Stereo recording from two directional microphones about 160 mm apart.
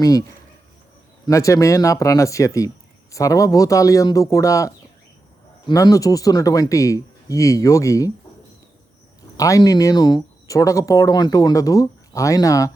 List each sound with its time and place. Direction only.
0.0 s speech: 20° left (ahead or behind)
1.3 s speech: 20° left (ahead or behind)
9.4 s speech: 20° left (ahead or behind)